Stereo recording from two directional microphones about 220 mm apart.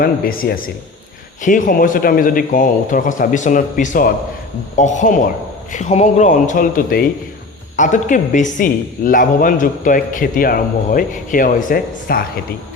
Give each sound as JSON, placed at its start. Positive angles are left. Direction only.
{"t": 0.0, "sound": "speech", "side_deg": 40}